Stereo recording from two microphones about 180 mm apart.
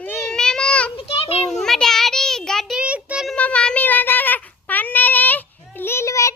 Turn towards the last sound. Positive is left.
turn(degrees=15)  # may be behind; listen again after turning